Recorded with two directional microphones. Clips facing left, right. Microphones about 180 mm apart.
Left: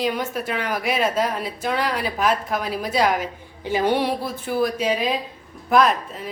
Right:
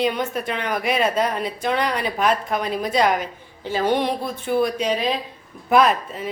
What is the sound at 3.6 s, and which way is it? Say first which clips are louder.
A woman's voice: even; 15° left (ahead or behind).